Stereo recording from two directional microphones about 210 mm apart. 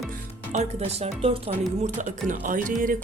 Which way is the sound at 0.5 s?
30° right (ahead or behind).